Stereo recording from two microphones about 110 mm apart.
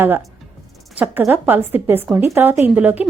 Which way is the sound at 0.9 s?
15° right (ahead or behind).